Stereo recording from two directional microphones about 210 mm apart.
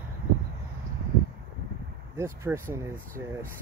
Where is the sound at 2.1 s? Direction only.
15° right (ahead or behind).